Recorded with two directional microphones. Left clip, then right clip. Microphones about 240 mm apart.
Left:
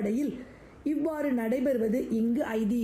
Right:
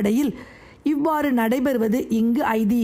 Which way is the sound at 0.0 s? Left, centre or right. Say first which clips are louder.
Right 8 dB; right.